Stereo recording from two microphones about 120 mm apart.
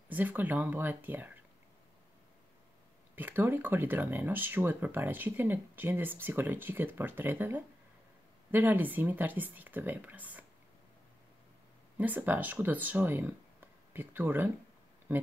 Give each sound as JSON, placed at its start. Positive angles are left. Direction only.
{"t": 0.1, "sound": "speech", "side_deg": -15}
{"t": 3.2, "sound": "speech", "side_deg": -15}
{"t": 12.0, "sound": "speech", "side_deg": -15}